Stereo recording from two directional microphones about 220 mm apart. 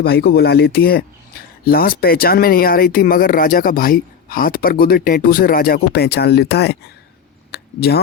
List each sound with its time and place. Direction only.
0.0 s speech: 45° left (ahead or behind)